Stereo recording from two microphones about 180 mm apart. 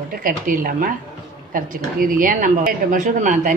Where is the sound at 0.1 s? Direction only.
50° right (ahead or behind).